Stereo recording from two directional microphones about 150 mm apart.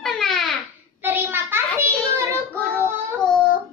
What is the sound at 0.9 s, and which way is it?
Child singing, 15° right (ahead or behind).